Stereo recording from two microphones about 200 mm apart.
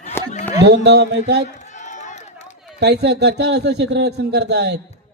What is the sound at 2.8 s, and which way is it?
Speech, 55° right (ahead or behind).